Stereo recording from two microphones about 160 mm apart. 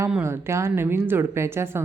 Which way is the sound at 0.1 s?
15° right (ahead or behind).